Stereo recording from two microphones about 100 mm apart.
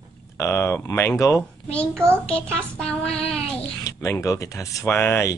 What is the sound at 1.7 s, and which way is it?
Speech, 10° left (ahead or behind).